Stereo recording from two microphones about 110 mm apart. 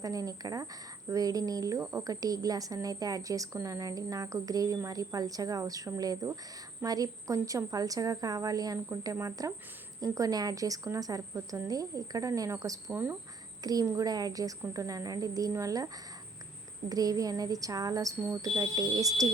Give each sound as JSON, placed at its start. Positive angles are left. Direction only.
{"t": 0.0, "sound": "a woman's voice", "side_deg": -35}
{"t": 1.8, "sound": "speech", "side_deg": -20}
{"t": 2.0, "sound": "a woman's voice", "side_deg": -35}
{"t": 12.9, "sound": "speech", "side_deg": -20}
{"t": 13.8, "sound": "a woman's voice", "side_deg": -30}
{"t": 16.9, "sound": "a woman's voice", "side_deg": -35}